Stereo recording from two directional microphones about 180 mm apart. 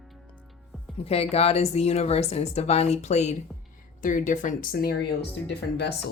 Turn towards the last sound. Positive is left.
turn(degrees=70)  # may be behind; listen again after turning